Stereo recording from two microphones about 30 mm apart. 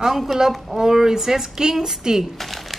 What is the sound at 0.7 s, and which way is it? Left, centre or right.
A woman's voice, centre.